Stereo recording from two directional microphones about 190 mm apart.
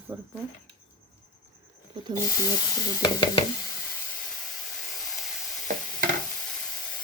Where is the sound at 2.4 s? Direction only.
20° left (ahead or behind).